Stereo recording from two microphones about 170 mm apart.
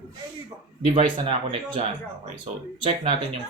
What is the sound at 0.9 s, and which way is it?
Speech, 35° right (ahead or behind).